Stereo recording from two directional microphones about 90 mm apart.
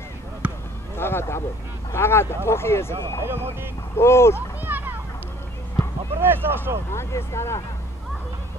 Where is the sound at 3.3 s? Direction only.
25° right (ahead or behind).